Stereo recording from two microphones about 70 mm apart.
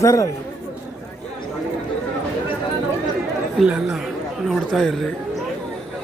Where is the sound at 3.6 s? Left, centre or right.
Centre.